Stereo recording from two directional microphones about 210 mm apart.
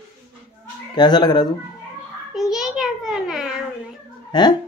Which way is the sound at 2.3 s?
Centre (ahead or behind).